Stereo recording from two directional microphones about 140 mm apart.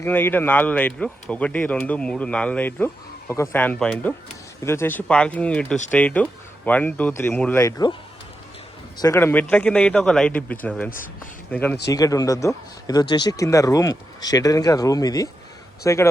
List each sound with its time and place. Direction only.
0.0 s speech: 15° left (ahead or behind)
7.6 s speech: 30° left (ahead or behind)
9.0 s speech: 20° left (ahead or behind)
11.9 s speech: 25° left (ahead or behind)